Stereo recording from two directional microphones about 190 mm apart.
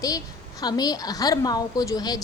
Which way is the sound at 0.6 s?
20° left (ahead or behind).